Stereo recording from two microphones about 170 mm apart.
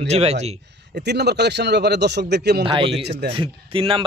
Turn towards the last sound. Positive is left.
turn(degrees=-30)  # may be behind; listen again after turning